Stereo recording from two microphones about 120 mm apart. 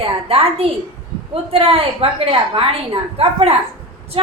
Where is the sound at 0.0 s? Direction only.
50° right (ahead or behind).